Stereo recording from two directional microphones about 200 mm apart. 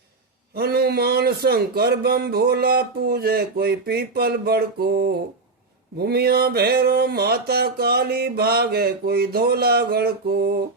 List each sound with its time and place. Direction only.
0.5 s speech: 50° right (ahead or behind)